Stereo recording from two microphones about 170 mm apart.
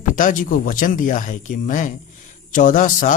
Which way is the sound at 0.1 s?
50° left (ahead or behind).